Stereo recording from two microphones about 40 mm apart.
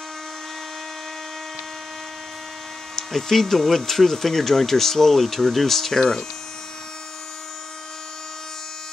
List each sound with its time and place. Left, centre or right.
3.0 s speech: centre
5.9 s speech: centre